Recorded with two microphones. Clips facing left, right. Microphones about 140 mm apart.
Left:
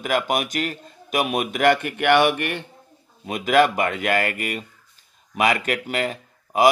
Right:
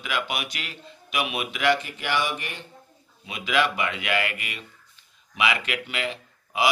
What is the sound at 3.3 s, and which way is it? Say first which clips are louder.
Speech: left 7 dB; 45° left (ahead or behind).